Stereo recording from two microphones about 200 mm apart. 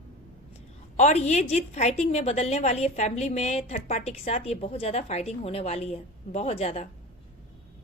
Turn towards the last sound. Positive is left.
turn(degrees=35)  # may be behind; listen again after turning